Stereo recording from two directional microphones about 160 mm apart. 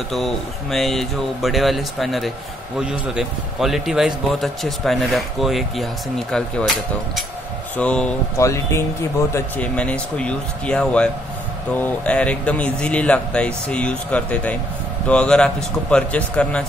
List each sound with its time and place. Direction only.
0.1 s a man's voice: centre (ahead or behind)
8.4 s speech: 20° left (ahead or behind)
9.3 s speech: 10° left (ahead or behind)